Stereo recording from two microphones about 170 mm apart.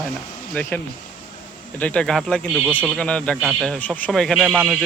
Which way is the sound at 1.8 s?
5° left (ahead or behind).